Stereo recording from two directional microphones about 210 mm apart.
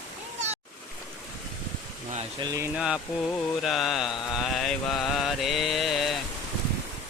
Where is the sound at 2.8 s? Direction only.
5° right (ahead or behind).